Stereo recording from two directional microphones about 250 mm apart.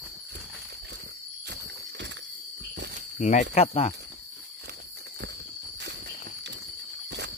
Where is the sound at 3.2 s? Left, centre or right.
Left.